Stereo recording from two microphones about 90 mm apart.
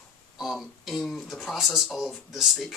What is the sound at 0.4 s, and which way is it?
Speech, centre (ahead or behind).